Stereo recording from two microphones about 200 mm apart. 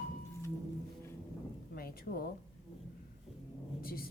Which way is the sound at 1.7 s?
50° left (ahead or behind).